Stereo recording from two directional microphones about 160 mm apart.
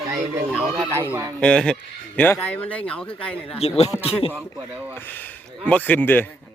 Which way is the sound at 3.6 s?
40° left (ahead or behind).